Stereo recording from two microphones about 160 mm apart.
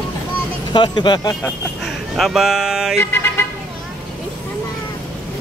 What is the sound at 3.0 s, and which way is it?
Speech, 15° left (ahead or behind).